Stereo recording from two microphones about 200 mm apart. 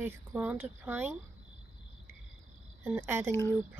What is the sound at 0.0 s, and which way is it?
Speech, 10° right (ahead or behind).